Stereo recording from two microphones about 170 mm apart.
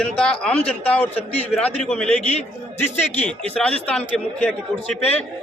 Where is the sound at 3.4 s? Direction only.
5° left (ahead or behind).